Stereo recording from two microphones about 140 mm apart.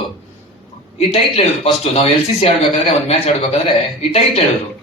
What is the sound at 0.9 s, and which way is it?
Speech, 45° left (ahead or behind).